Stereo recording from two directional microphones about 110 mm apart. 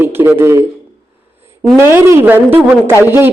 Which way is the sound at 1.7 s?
25° right (ahead or behind).